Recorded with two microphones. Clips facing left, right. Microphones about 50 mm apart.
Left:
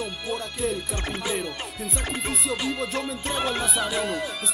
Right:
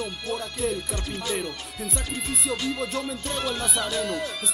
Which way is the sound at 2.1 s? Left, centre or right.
Left.